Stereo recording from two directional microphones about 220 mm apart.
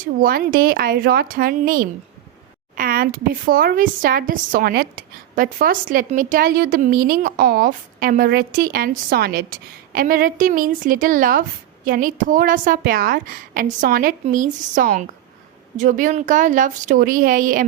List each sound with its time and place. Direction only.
0.0 s a woman's voice: 40° right (ahead or behind)